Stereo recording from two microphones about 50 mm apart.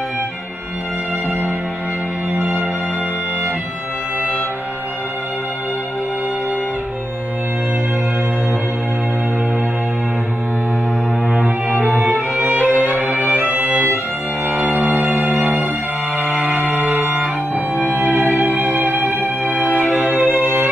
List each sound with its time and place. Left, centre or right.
11.3 s cello: right
12.4 s music: right
14.7 s music: right
16.5 s music: left
18.1 s music: right